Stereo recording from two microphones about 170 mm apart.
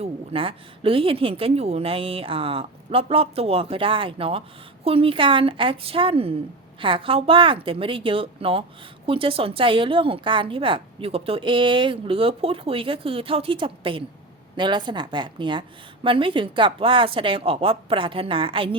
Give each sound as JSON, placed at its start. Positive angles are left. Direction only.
{"t": 0.0, "sound": "a woman's voice", "side_deg": -30}